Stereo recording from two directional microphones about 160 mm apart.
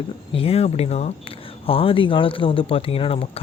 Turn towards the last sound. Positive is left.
turn(degrees=35)  # may be behind; listen again after turning